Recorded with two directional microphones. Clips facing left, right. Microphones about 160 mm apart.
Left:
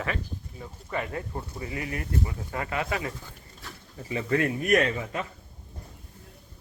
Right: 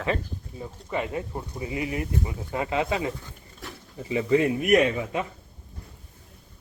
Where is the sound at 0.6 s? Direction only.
20° right (ahead or behind).